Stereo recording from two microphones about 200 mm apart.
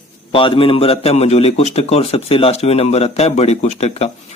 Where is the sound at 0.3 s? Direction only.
25° left (ahead or behind).